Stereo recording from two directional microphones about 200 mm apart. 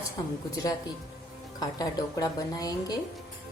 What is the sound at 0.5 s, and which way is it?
A woman's voice, 20° left (ahead or behind).